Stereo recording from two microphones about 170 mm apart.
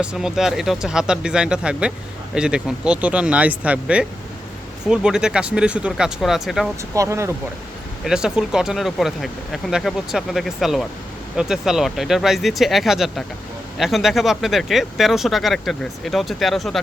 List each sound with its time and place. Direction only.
0.0 s speech: 5° right (ahead or behind)
6.9 s speech: 15° right (ahead or behind)
8.0 s speech: 5° right (ahead or behind)